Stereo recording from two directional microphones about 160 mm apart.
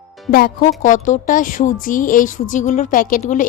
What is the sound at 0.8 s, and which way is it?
A woman's voice, 55° left (ahead or behind).